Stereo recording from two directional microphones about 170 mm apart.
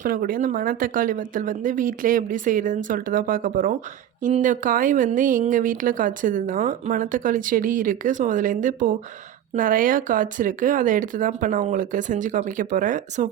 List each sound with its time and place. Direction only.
0.0 s speech: 55° right (ahead or behind)